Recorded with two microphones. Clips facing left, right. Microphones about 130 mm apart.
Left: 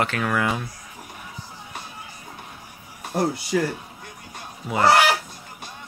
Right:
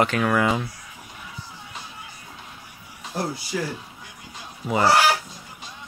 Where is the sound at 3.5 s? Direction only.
60° left (ahead or behind).